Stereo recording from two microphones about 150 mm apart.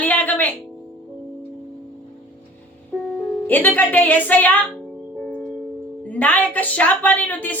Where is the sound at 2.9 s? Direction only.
5° right (ahead or behind).